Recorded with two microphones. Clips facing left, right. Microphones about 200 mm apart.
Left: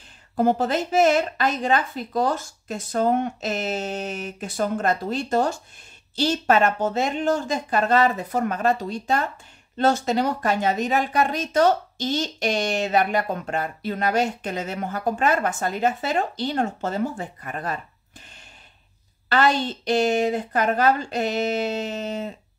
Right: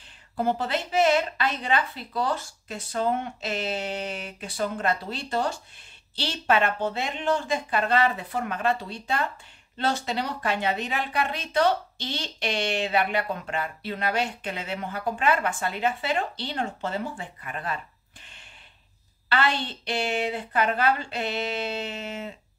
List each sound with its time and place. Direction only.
0.4 s speech: 45° left (ahead or behind)
19.2 s speech: 45° left (ahead or behind)